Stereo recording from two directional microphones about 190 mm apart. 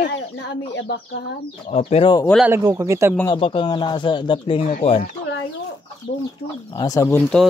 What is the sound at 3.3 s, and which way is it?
Speech, 25° left (ahead or behind).